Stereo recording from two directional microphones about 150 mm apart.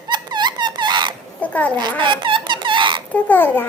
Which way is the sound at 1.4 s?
10° left (ahead or behind).